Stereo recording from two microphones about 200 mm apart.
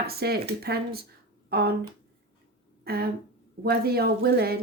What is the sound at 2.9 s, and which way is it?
Speech, 50° right (ahead or behind).